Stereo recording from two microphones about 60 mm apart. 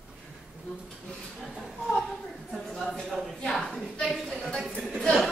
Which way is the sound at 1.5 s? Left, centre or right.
Centre.